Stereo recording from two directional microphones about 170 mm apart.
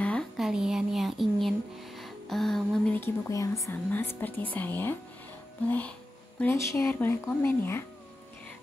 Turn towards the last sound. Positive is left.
turn(degrees=15)  # may be behind; listen again after turning